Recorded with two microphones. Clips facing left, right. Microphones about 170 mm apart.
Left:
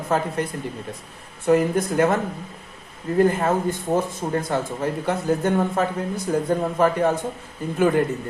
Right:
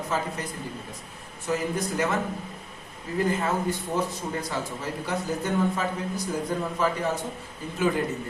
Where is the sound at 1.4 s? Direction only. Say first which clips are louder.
Left 9 dB; 55° left (ahead or behind).